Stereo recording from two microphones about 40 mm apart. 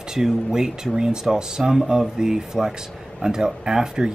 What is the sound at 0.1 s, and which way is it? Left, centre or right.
Speech, centre.